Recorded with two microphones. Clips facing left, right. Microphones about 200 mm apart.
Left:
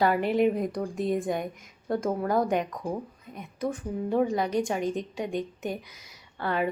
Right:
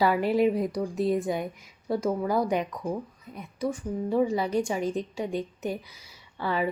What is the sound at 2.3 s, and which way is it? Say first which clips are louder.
Speech: even; 50° left (ahead or behind).